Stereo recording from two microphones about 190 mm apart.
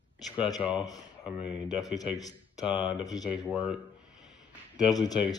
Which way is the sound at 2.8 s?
20° left (ahead or behind).